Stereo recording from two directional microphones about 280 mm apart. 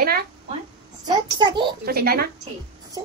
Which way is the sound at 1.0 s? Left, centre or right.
Centre.